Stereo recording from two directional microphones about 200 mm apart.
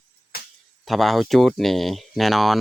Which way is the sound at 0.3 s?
50° left (ahead or behind).